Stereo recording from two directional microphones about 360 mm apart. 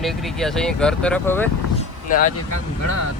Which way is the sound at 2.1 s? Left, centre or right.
Left.